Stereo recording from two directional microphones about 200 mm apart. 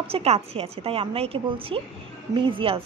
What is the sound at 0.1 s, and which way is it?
A woman's voice, 30° right (ahead or behind).